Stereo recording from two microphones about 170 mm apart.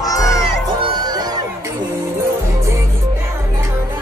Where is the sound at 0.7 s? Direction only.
25° right (ahead or behind).